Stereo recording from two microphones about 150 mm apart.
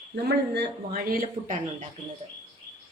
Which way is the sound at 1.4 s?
50° right (ahead or behind).